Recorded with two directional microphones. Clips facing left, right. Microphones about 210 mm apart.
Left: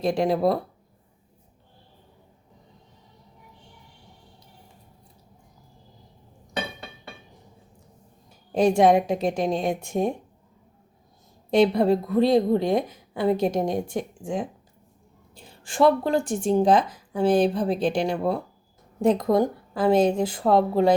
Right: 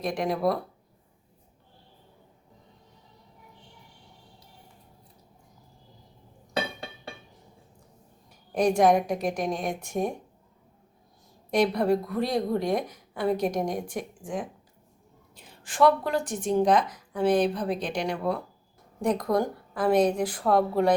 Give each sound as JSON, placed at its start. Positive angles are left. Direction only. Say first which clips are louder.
{"t": 0.0, "sound": "speech", "louder": "left 5 dB", "side_deg": 30}
{"t": 8.5, "sound": "speech", "louder": "left 3 dB", "side_deg": 25}
{"t": 11.5, "sound": "speech", "louder": "left 4 dB", "side_deg": 25}